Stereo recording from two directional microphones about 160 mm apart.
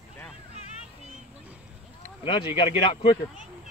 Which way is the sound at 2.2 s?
30° left (ahead or behind).